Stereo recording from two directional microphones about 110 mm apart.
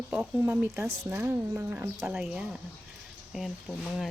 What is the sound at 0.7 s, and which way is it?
A woman's voice, 25° right (ahead or behind).